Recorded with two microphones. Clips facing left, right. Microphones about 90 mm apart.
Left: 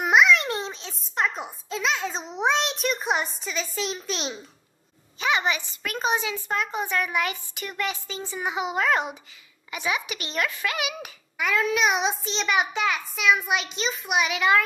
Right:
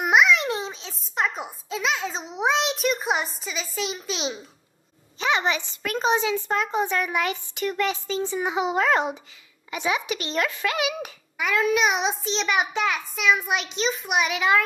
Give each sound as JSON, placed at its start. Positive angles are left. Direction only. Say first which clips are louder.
{"t": 0.0, "sound": "a child's voice", "louder": "even", "side_deg": 0}
{"t": 5.3, "sound": "a child's voice", "louder": "right 1 dB", "side_deg": 10}
{"t": 6.4, "sound": "a woman's voice", "louder": "right 3 dB", "side_deg": -25}
{"t": 7.2, "sound": "a child's voice", "louder": "right 5 dB", "side_deg": 10}
{"t": 8.5, "sound": "a woman's voice", "louder": "right 1 dB", "side_deg": -25}
{"t": 10.0, "sound": "a child's voice", "louder": "right 6 dB", "side_deg": 10}
{"t": 10.3, "sound": "a woman's voice", "louder": "right 1 dB", "side_deg": -25}
{"t": 10.8, "sound": "a child's voice", "louder": "right 4 dB", "side_deg": 10}
{"t": 11.3, "sound": "a child's voice", "louder": "right 2 dB", "side_deg": 0}